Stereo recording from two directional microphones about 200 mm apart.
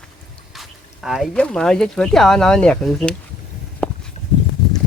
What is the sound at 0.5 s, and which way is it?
Speech, centre (ahead or behind).